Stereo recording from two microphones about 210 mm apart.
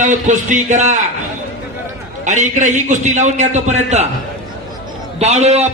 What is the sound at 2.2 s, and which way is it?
A man's voice, 35° right (ahead or behind).